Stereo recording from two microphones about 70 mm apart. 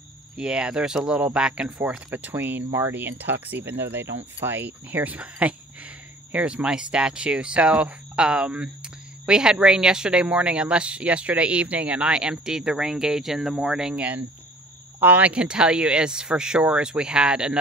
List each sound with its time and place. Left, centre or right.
0.4 s speech: centre
2.1 s speech: right; by 14.0 s centre
15.0 s speech: right